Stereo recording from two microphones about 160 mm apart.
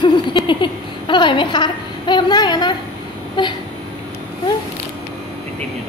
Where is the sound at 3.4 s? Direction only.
30° left (ahead or behind).